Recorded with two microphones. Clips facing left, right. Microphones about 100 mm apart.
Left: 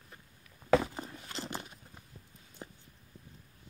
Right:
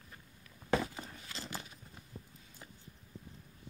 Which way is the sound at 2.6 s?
35° left (ahead or behind).